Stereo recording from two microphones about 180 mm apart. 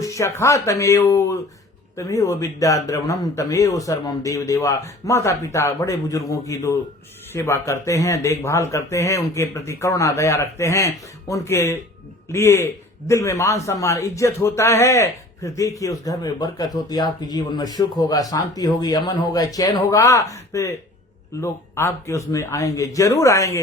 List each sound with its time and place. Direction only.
0.0 s speech: 15° left (ahead or behind)